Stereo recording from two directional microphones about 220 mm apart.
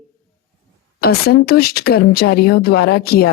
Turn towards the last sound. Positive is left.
turn(degrees=45)  # may be behind; listen again after turning